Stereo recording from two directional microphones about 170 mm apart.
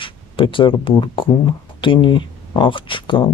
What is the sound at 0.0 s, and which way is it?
Speech, 30° left (ahead or behind).